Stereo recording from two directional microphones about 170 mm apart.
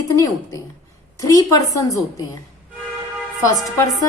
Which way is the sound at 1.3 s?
20° left (ahead or behind).